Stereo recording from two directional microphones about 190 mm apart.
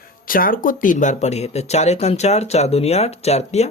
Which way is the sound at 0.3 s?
50° left (ahead or behind).